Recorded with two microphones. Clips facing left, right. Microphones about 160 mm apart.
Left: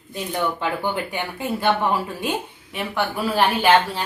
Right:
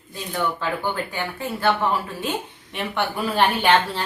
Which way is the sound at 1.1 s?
15° left (ahead or behind).